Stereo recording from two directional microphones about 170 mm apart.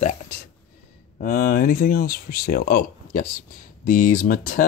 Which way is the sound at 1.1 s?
55° left (ahead or behind).